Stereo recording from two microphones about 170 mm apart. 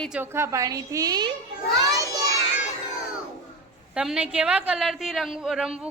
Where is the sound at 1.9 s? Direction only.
20° right (ahead or behind).